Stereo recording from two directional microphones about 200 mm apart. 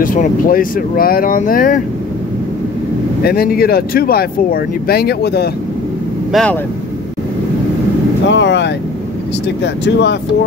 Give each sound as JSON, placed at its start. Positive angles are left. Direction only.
{"t": 0.0, "sound": "speech", "side_deg": 40}
{"t": 3.3, "sound": "speech", "side_deg": 50}
{"t": 6.3, "sound": "speech", "side_deg": 5}
{"t": 8.3, "sound": "speech", "side_deg": 65}